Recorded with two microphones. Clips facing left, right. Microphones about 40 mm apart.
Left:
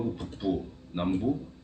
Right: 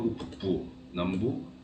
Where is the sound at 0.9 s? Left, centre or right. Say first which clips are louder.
Left 1 dB; right.